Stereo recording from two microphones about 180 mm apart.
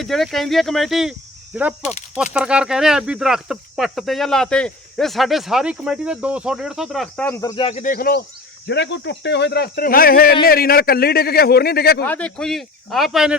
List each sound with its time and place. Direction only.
0.0 s speech: centre (ahead or behind); by 7.6 s 15° left (ahead or behind)
7.6 s speech: 40° left (ahead or behind); by 8.2 s 55° left (ahead or behind)
8.6 s a man's voice: 75° left (ahead or behind)
12.0 s speech: 10° left (ahead or behind)